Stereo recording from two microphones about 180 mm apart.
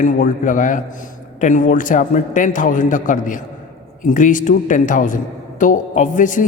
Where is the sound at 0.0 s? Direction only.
45° left (ahead or behind).